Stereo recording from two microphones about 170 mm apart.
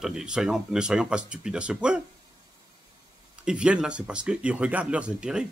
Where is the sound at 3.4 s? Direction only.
5° right (ahead or behind).